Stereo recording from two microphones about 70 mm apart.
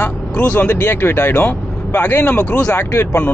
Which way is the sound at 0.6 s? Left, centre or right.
Left.